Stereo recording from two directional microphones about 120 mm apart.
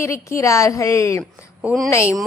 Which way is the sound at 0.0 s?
25° left (ahead or behind).